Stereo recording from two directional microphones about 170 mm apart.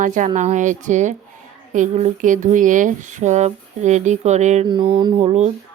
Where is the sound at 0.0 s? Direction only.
50° right (ahead or behind).